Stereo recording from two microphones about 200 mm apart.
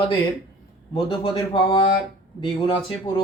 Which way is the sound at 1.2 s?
25° left (ahead or behind).